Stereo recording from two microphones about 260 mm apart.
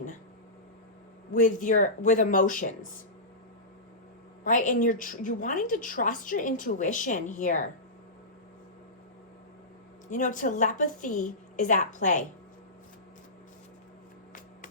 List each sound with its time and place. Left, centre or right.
1.3 s a woman's voice: left
4.4 s a woman's voice: left
10.1 s a woman's voice: left